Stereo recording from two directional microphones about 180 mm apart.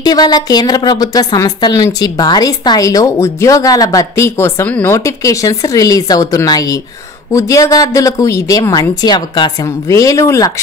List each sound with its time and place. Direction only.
0.0 s a woman's voice: 20° left (ahead or behind)